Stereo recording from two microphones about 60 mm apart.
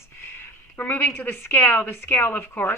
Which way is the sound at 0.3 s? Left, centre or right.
Left.